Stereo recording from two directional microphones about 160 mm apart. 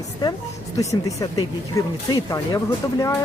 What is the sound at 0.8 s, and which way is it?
Speech, 20° left (ahead or behind).